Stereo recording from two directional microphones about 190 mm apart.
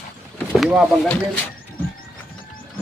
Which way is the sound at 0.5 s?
5° right (ahead or behind).